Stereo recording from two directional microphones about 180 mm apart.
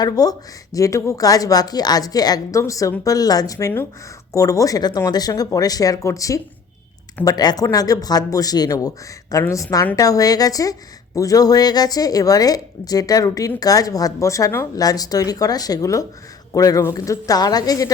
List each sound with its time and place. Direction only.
0.0 s a woman's voice: 20° left (ahead or behind)